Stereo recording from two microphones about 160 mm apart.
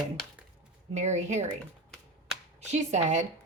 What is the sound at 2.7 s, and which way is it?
Speech, 45° right (ahead or behind).